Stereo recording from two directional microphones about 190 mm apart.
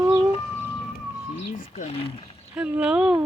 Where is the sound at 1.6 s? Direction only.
35° left (ahead or behind).